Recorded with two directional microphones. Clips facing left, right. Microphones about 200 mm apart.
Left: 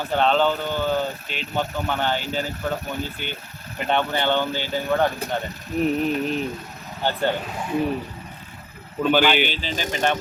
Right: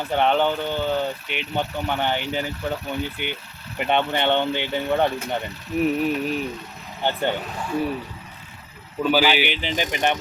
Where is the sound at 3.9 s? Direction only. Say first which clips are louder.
Right 1 dB; 20° right (ahead or behind).